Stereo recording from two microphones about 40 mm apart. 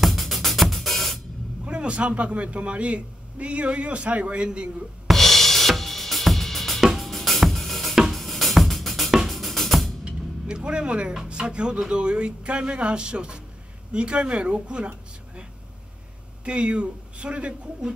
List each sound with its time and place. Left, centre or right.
0.0 s music: centre
1.6 s a man's voice: right
5.1 s drum kit: centre
7.0 s drum: centre
7.9 s drum: centre
8.2 s music: centre
10.0 s speech: right
16.4 s speech: right